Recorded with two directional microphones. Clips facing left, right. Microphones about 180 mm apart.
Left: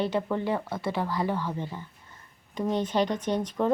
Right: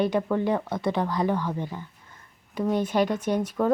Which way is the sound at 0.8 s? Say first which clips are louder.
Right 3 dB; 20° right (ahead or behind).